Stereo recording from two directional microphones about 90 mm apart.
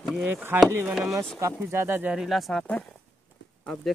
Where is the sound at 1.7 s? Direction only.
30° right (ahead or behind).